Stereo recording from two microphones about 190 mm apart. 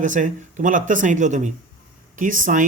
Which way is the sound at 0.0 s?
40° right (ahead or behind).